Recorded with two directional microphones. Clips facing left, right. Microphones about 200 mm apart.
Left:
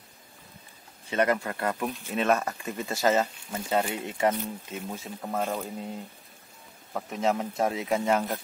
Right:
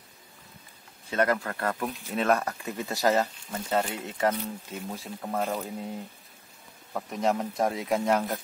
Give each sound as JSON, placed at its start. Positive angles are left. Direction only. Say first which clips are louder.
{"t": 1.1, "sound": "speech", "louder": "left 1 dB", "side_deg": 10}
{"t": 6.9, "sound": "speech", "louder": "even", "side_deg": 5}